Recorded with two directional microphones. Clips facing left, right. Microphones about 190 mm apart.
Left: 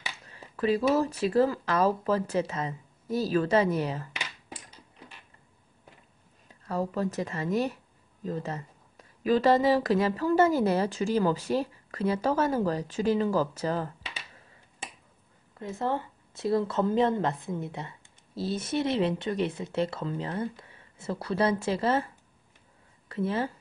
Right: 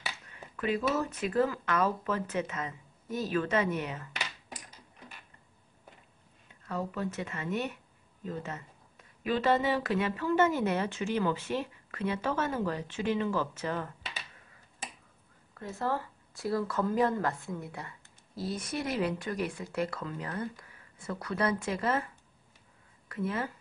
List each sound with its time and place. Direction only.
0.3 s speech: 30° left (ahead or behind)
6.7 s speech: 35° left (ahead or behind)
15.5 s speech: 20° left (ahead or behind)